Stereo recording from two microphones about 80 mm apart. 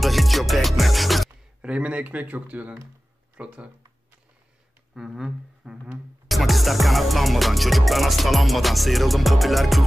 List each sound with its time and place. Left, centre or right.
0.0 s music: centre
1.3 s speech: centre
4.9 s music: centre
6.2 s music: centre